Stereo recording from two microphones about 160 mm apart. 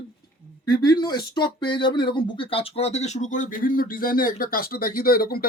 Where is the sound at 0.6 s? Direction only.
25° left (ahead or behind).